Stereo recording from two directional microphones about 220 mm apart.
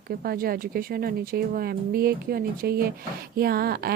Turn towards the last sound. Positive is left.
turn(degrees=-45)  # may be behind; listen again after turning